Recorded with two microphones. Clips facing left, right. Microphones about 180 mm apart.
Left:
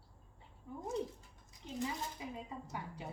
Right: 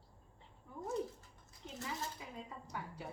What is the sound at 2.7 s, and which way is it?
Speech, 20° left (ahead or behind).